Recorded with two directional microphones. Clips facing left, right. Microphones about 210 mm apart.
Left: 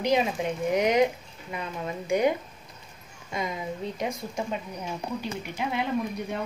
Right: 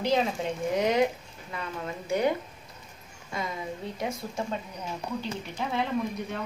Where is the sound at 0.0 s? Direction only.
15° left (ahead or behind).